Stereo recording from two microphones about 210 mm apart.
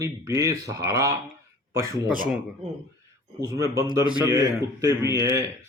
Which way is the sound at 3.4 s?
15° right (ahead or behind).